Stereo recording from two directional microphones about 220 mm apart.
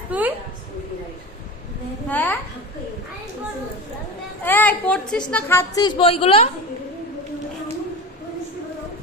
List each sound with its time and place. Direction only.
0.1 s a woman's voice: 10° right (ahead or behind)
2.0 s a woman's voice: 10° left (ahead or behind)
4.4 s a woman's voice: 10° left (ahead or behind)
6.0 s a woman's voice: 25° left (ahead or behind)